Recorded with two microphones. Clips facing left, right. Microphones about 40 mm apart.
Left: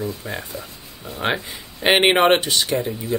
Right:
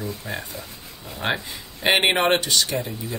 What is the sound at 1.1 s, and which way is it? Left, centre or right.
Speech, centre.